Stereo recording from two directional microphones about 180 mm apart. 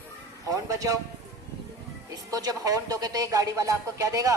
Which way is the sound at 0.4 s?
20° right (ahead or behind).